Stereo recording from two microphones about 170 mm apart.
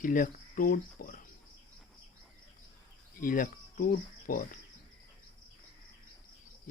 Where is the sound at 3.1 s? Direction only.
55° left (ahead or behind).